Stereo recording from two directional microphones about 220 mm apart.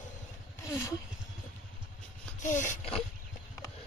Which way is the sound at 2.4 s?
35° left (ahead or behind).